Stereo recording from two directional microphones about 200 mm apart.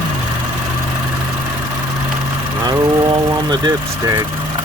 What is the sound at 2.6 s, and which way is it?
Vehicle, 20° right (ahead or behind).